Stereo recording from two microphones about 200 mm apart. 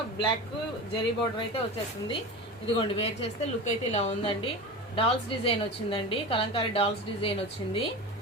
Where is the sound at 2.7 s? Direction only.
25° left (ahead or behind).